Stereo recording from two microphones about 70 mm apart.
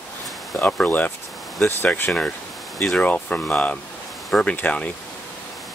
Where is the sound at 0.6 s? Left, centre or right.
Left.